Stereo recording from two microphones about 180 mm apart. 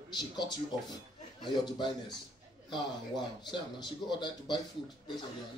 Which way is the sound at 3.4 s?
25° left (ahead or behind).